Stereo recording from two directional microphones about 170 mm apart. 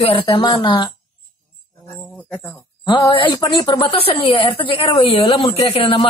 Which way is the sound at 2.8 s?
30° left (ahead or behind).